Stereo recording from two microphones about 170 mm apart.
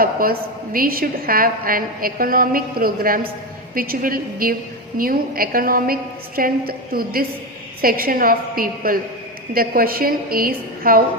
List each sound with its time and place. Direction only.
0.0 s a woman's voice: 55° right (ahead or behind)